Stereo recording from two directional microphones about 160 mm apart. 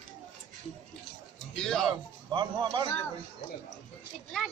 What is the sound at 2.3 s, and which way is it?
Speech, 30° right (ahead or behind).